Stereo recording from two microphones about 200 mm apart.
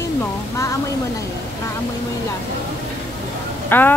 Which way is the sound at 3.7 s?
10° left (ahead or behind).